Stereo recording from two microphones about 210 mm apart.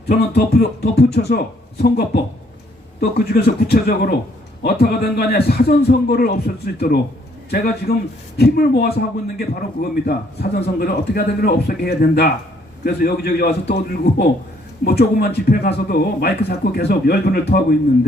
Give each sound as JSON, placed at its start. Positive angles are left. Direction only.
{"t": 0.1, "sound": "a man's voice", "side_deg": 45}
{"t": 10.1, "sound": "a man's voice", "side_deg": 45}